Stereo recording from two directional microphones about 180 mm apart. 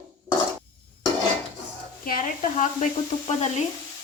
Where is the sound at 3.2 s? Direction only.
40° left (ahead or behind).